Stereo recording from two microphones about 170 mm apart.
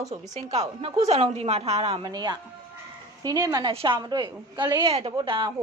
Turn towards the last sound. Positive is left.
turn(degrees=-25)  # may be behind; listen again after turning